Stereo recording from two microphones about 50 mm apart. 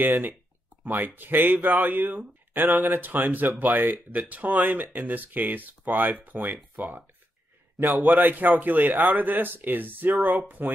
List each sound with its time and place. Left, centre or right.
0.0 s speech: right